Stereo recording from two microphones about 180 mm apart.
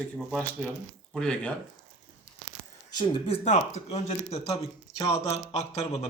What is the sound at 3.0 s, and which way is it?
Speech, 30° left (ahead or behind).